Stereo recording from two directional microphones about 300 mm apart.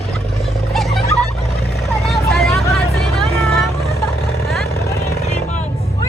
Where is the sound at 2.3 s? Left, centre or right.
Centre.